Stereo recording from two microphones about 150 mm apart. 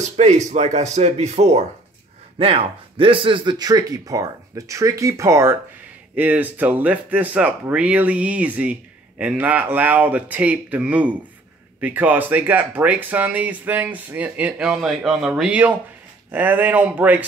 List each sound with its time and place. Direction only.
0.5 s speech: 50° right (ahead or behind); by 17.2 s 10° right (ahead or behind)